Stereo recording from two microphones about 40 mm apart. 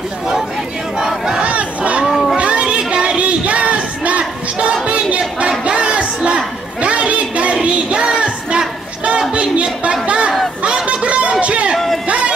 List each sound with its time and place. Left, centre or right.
0.9 s battle cry: centre
1.4 s crowd: right
2.0 s cat: centre
2.3 s a sound: right
9.3 s music: right
10.0 s a sound: right